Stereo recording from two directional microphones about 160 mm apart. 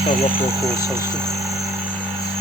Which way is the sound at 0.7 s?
15° right (ahead or behind).